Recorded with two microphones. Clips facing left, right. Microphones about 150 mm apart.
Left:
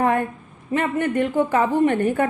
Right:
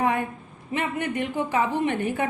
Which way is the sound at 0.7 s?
50° left (ahead or behind).